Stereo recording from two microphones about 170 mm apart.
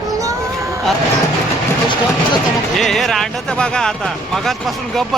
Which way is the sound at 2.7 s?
Centre (ahead or behind).